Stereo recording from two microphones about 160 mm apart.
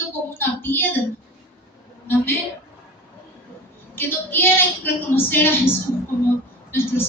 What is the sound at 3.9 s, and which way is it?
A woman's voice, 15° left (ahead or behind).